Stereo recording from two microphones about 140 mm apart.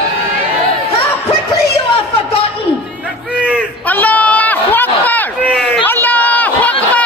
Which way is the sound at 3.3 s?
10° right (ahead or behind).